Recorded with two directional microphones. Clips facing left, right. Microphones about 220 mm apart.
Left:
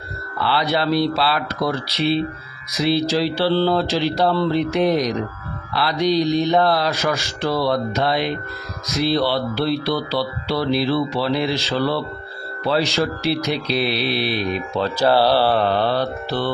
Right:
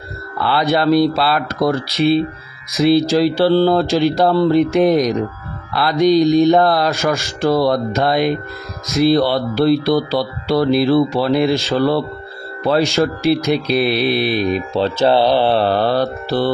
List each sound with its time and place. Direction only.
0.4 s speech: 50° right (ahead or behind)
14.8 s speech: 25° right (ahead or behind)
15.5 s mantra: 35° right (ahead or behind)